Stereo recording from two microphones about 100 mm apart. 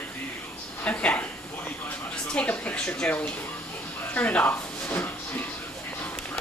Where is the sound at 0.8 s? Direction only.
15° left (ahead or behind).